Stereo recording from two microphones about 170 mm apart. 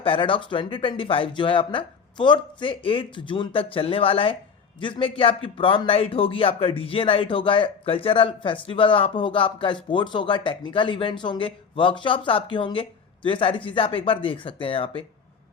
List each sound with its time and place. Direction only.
0.0 s speech: 30° left (ahead or behind)